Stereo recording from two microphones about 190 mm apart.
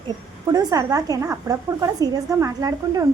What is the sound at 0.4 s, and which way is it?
A woman's voice, 20° right (ahead or behind).